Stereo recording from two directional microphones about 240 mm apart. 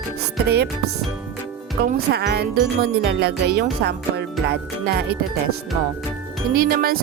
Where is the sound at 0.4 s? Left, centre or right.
Right.